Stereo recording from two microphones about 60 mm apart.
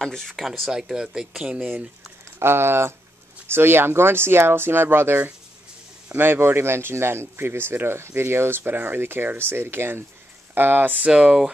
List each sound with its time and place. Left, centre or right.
0.0 s speech: centre
1.6 s speech: right
2.3 s speech: right
11.1 s speech: centre